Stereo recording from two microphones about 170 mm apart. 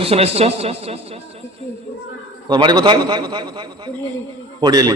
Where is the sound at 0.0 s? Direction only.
35° right (ahead or behind).